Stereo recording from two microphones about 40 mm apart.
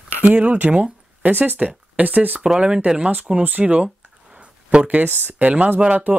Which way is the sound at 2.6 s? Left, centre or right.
Right.